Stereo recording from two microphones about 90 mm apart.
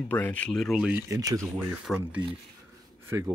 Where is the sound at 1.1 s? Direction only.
40° right (ahead or behind).